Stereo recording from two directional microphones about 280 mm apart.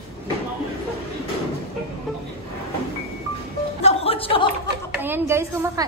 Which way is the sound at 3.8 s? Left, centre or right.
Left.